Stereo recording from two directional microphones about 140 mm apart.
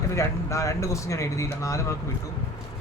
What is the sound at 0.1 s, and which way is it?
Speech, 20° left (ahead or behind).